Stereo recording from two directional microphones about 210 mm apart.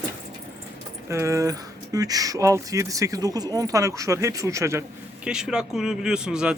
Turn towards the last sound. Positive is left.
turn(degrees=-5)  # may be behind; listen again after turning